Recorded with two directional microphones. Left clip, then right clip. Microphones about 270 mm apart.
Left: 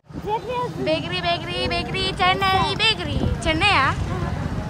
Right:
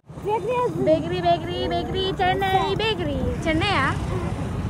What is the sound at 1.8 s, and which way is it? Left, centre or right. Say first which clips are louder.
Music: left 1 dB; left.